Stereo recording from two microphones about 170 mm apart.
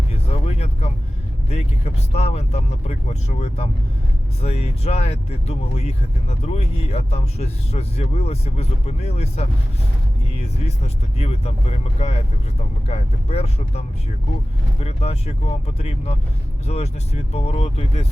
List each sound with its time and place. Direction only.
0.3 s vehicle: 35° left (ahead or behind)
1.5 s speech: 40° left (ahead or behind)